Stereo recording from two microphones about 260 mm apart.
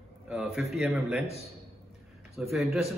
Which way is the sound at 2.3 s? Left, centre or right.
Centre.